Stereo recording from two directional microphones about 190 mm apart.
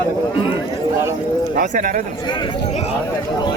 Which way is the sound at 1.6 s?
45° right (ahead or behind).